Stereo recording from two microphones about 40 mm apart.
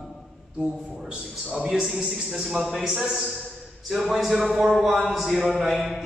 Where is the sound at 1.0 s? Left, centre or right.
Centre.